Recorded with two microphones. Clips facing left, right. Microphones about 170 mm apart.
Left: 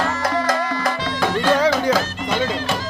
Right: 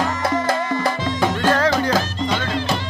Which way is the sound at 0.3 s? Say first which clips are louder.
Right 1 dB; 25° right (ahead or behind).